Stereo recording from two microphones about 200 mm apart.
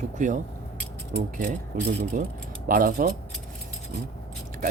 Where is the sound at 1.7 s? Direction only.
45° right (ahead or behind).